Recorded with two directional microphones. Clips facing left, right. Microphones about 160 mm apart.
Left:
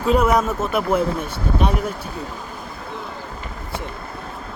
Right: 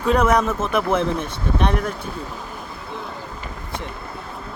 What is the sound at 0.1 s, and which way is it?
Speech, 5° left (ahead or behind).